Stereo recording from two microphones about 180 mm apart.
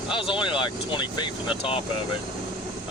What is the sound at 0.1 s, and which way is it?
Speech, 30° left (ahead or behind).